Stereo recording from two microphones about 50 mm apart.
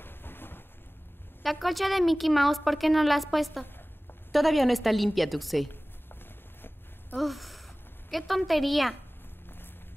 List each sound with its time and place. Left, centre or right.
0.0 s thunder: left
1.4 s a woman's voice: centre
3.6 s a sound: left
4.3 s a woman's voice: centre
7.2 s a woman's voice: centre